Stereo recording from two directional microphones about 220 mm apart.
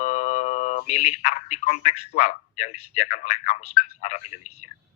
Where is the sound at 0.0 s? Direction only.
35° left (ahead or behind).